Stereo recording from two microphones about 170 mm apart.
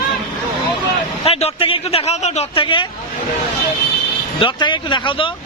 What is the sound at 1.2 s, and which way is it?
Speech, 35° left (ahead or behind).